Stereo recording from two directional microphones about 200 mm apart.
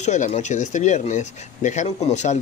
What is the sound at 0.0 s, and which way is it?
Speech, 35° left (ahead or behind).